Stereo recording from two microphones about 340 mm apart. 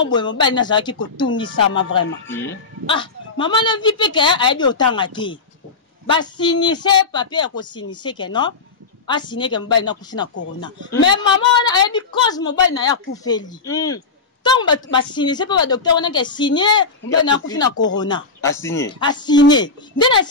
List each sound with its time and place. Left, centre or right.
0.0 s a woman's voice: centre
10.3 s speech: left
11.1 s a woman's voice: centre